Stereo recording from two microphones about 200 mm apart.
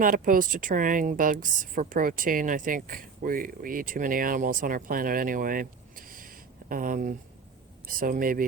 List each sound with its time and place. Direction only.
0.0 s a woman's voice: 45° right (ahead or behind)